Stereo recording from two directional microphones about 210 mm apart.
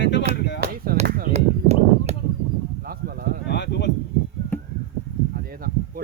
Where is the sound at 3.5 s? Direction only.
55° left (ahead or behind).